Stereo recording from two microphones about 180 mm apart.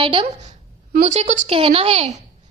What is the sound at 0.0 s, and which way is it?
A woman's voice, 30° right (ahead or behind).